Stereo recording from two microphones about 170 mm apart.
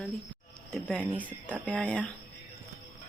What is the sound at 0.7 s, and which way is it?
Speech, 5° left (ahead or behind).